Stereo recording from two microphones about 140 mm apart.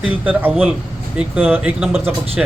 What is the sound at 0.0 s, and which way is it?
Speech, 10° right (ahead or behind).